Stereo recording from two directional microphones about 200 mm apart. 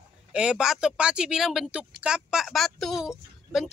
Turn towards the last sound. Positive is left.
turn(degrees=0)  # may be behind; listen again after turning